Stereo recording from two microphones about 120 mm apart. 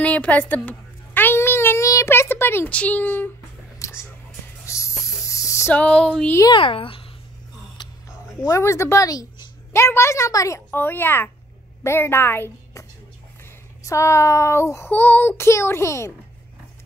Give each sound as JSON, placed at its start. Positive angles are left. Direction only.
{"t": 0.0, "sound": "a woman's voice", "side_deg": 10}
{"t": 0.7, "sound": "a sound", "side_deg": 15}
{"t": 3.8, "sound": "whispering", "side_deg": 25}
{"t": 4.6, "sound": "a sound", "side_deg": 25}
{"t": 5.2, "sound": "spray", "side_deg": 25}
{"t": 5.8, "sound": "a sound", "side_deg": 10}
{"t": 6.5, "sound": "a child's voice", "side_deg": 45}
{"t": 8.5, "sound": "a woman's voice", "side_deg": 25}
{"t": 13.8, "sound": "a woman's voice", "side_deg": 25}